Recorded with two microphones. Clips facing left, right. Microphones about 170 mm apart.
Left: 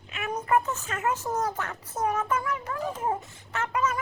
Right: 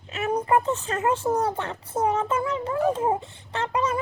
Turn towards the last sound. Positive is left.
turn(degrees=-30)  # may be behind; listen again after turning